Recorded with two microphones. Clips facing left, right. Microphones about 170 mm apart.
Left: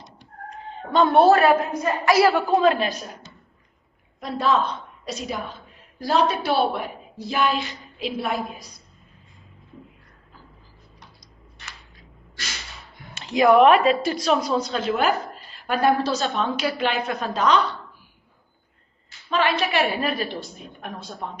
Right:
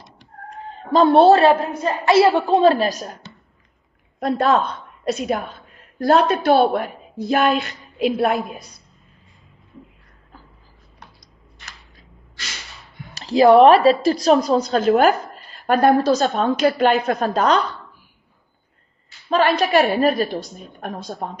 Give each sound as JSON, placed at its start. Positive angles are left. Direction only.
{"t": 0.9, "sound": "a woman's voice", "side_deg": -30}
{"t": 4.2, "sound": "a woman's voice", "side_deg": -55}
{"t": 13.1, "sound": "a woman's voice", "side_deg": -35}
{"t": 19.3, "sound": "a woman's voice", "side_deg": -40}